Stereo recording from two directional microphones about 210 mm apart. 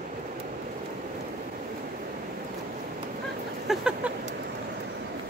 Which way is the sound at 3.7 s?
5° right (ahead or behind).